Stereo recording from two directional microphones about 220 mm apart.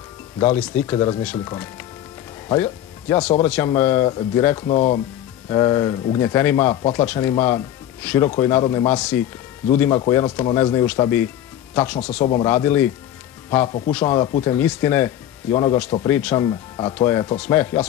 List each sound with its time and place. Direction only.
0.4 s speech: 5° left (ahead or behind)
4.6 s speech: 30° left (ahead or behind)
5.5 s speech: 15° left (ahead or behind)
12.2 s speech: 25° left (ahead or behind)
12.4 s speech: 10° left (ahead or behind)
13.7 s speech: 25° left (ahead or behind)
13.9 s speech: 15° left (ahead or behind)
16.1 s speech: 5° left (ahead or behind)
16.3 s speech: 20° left (ahead or behind)